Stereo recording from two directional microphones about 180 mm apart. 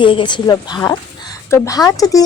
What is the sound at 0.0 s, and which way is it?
Speech, 30° left (ahead or behind).